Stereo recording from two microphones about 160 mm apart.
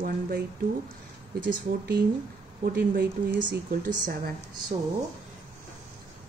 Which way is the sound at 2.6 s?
80° right.